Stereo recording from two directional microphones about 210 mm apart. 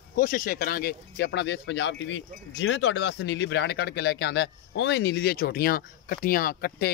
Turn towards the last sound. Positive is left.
turn(degrees=45)  # may be behind; listen again after turning